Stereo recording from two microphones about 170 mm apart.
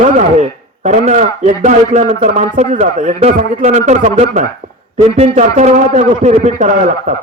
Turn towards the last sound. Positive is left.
turn(degrees=-50)  # may be behind; listen again after turning